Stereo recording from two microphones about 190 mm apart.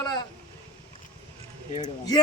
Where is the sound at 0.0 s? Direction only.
20° left (ahead or behind).